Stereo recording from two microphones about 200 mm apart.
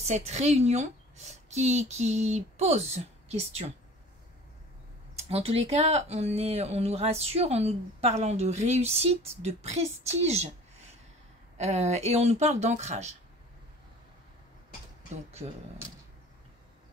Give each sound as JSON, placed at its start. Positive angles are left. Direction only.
{"t": 0.0, "sound": "speech", "side_deg": -35}
{"t": 5.3, "sound": "speech", "side_deg": -30}
{"t": 11.5, "sound": "speech", "side_deg": -35}